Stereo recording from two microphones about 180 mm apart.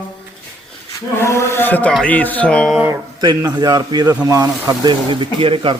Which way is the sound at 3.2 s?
20° right (ahead or behind).